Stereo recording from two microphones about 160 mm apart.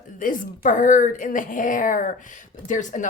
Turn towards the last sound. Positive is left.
turn(degrees=55)  # may be behind; listen again after turning